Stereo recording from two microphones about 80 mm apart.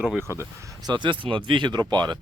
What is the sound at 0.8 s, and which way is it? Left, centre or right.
Speech, right.